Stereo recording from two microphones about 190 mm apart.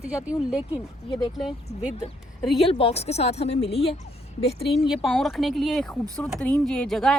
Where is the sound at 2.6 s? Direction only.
30° left (ahead or behind).